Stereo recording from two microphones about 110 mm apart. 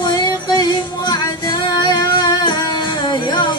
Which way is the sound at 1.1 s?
40° left (ahead or behind).